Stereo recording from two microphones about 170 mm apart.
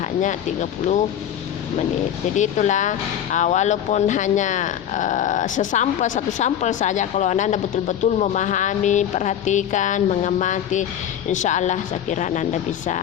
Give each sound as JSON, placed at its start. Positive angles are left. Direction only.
{"t": 0.0, "sound": "speech", "side_deg": 45}
{"t": 2.3, "sound": "speech", "side_deg": 45}